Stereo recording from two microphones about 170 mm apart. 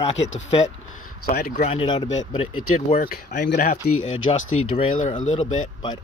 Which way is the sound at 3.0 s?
60° left (ahead or behind).